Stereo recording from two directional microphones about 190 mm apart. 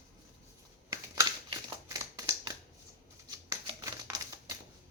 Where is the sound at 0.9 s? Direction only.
20° right (ahead or behind).